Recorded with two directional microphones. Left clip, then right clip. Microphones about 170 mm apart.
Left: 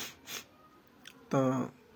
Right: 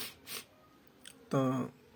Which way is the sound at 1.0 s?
20° right (ahead or behind).